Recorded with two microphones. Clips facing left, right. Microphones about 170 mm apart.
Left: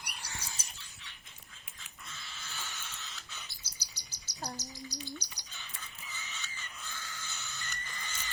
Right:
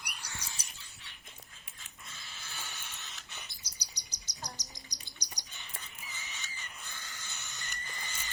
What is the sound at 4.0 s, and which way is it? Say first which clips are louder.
Bird vocalization: right 1 dB; 15° right (ahead or behind).